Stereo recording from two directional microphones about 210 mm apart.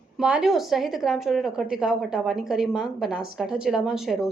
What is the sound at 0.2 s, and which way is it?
A woman's voice, 5° right (ahead or behind).